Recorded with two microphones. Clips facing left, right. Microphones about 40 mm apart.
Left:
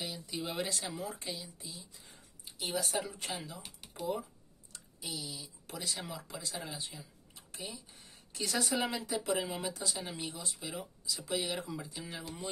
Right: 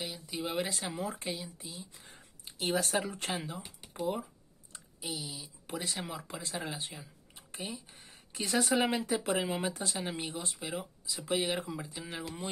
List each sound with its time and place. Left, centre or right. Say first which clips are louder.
0.0 s speech: right 2 dB; centre
0.7 s speech: right 3 dB; right
2.1 s speech: right 4 dB; right
4.7 s speech: right 3 dB; centre; by 10.7 s right
10.7 s speech: right 2 dB; right
11.5 s speech: right 3 dB; centre